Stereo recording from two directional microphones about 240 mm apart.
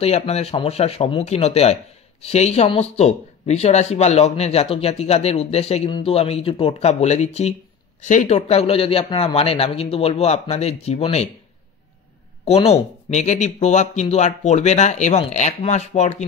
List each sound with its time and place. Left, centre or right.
0.0 s speech: left
12.4 s speech: left